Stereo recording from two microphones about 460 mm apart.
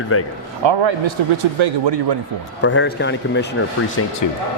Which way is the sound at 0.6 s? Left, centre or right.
Right.